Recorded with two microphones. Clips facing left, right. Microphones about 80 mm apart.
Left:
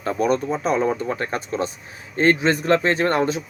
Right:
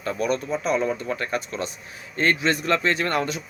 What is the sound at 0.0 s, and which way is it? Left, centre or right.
A man's voice, left.